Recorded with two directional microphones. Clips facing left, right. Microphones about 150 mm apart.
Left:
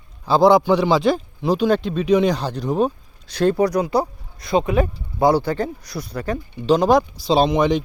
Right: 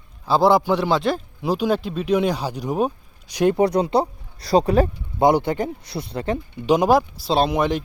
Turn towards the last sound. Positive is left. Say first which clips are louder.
# left 3 dB
turn(degrees=-5)  # may be behind; listen again after turning